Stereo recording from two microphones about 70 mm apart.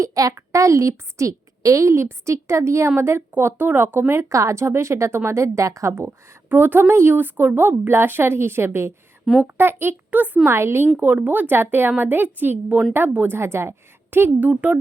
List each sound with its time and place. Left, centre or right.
0.0 s a child's voice: right
4.2 s a woman's voice: right
6.5 s speech: right
10.5 s speech: right
10.9 s a woman's voice: right
14.4 s a woman's voice: right